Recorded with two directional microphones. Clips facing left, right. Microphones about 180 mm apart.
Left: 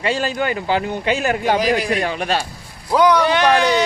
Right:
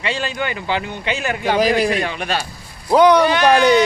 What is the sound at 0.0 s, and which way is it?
Speech, 40° left (ahead or behind).